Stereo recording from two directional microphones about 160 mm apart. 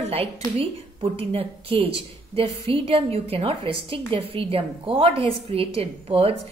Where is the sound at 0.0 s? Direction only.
40° right (ahead or behind).